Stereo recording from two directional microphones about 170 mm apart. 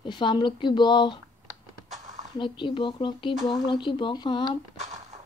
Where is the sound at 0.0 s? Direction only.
30° left (ahead or behind).